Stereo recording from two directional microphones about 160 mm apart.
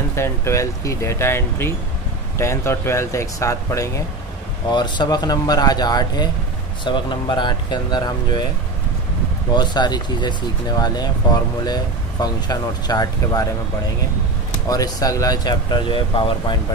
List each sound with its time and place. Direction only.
0.1 s speech: 15° left (ahead or behind)
9.5 s speech: 25° left (ahead or behind)
14.7 s speech: 20° left (ahead or behind)